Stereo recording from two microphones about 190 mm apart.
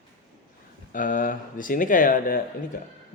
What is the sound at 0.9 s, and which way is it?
A man's voice, 45° left (ahead or behind).